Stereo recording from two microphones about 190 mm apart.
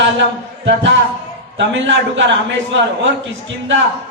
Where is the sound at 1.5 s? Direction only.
70° right (ahead or behind).